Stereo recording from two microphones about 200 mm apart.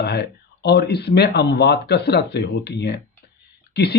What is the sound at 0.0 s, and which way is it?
Speech, 55° left (ahead or behind).